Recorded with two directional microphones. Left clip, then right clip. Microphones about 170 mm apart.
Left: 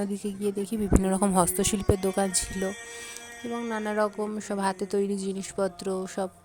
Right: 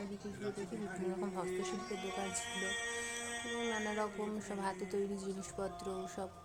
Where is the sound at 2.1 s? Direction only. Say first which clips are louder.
Left 12 dB; 60° left (ahead or behind).